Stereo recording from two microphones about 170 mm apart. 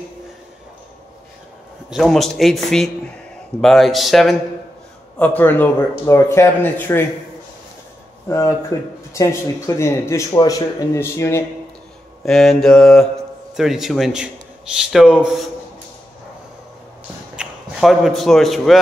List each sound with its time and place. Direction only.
1.9 s a man's voice: centre (ahead or behind)
8.3 s speech: 20° left (ahead or behind)
12.3 s a man's voice: centre (ahead or behind)
17.4 s speech: centre (ahead or behind)